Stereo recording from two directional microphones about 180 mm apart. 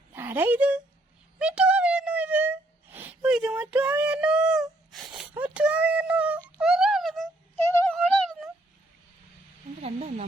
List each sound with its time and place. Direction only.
0.1 s speech: 10° right (ahead or behind)
1.4 s a sound: 5° right (ahead or behind)
3.2 s speech: 5° right (ahead or behind)
6.6 s music: 5° right (ahead or behind)
7.5 s music: 15° left (ahead or behind)
7.9 s a sound: 5° left (ahead or behind)
9.8 s speech: 35° right (ahead or behind)